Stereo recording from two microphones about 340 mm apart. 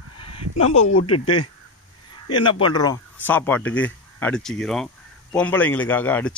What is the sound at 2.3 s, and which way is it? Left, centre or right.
Speech, centre.